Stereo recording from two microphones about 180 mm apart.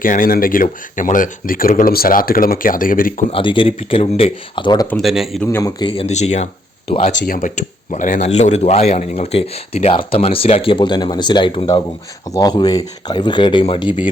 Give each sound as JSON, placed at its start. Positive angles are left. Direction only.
{"t": 0.0, "sound": "speech", "side_deg": 50}
{"t": 3.3, "sound": "speech", "side_deg": 30}
{"t": 4.9, "sound": "speech", "side_deg": 0}
{"t": 5.5, "sound": "a man's voice", "side_deg": 15}
{"t": 5.8, "sound": "speech", "side_deg": 30}
{"t": 7.3, "sound": "a man's voice", "side_deg": 45}